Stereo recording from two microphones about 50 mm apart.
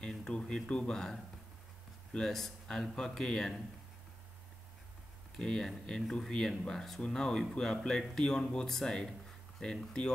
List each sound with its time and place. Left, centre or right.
0.2 s speech: centre
2.1 s speech: centre
5.4 s speech: centre